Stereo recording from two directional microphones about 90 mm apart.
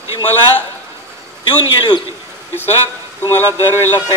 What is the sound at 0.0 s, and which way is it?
Speech, 30° right (ahead or behind).